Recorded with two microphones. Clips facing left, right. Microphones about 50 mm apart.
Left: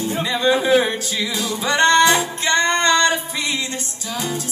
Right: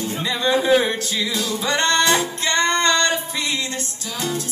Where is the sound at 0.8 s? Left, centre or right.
Left.